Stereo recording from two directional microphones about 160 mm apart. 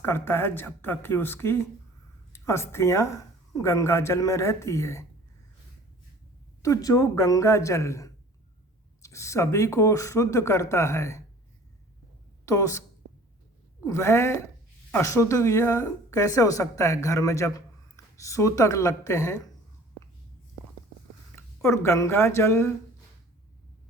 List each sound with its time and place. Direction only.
0.0 s speech: 15° left (ahead or behind)
6.6 s speech: 20° left (ahead or behind)
12.5 s speech: 20° left (ahead or behind)
13.8 s speech: 15° left (ahead or behind)
21.3 s speech: 15° left (ahead or behind)